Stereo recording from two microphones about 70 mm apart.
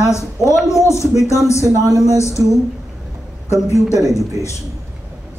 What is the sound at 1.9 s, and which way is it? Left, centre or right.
Speech, right.